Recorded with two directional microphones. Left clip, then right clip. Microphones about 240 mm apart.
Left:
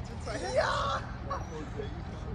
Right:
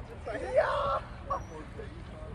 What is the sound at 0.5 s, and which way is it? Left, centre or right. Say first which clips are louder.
Speech: right 2 dB; right.